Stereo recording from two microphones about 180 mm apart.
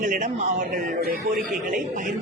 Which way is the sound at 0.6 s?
55° right (ahead or behind).